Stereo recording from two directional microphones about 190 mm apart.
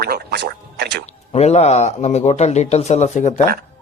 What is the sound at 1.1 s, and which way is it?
Speech, 35° left (ahead or behind).